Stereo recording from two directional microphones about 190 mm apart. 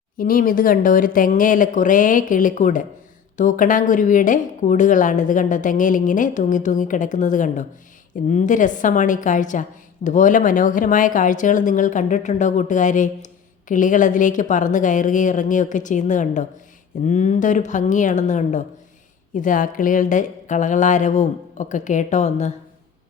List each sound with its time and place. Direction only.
0.2 s a woman's voice: 45° left (ahead or behind)